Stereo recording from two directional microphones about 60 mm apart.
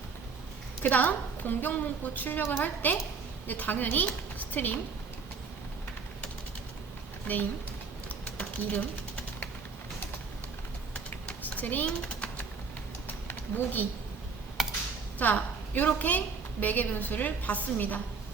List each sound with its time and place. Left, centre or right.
0.8 s a woman's voice: left
8.4 s sewing machine: left
11.4 s a sound: left
13.1 s a sound: left
14.6 s computer keyboard: centre
15.2 s a woman's voice: left